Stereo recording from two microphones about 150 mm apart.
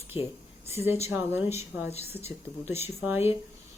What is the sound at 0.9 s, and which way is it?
Speech, 15° right (ahead or behind).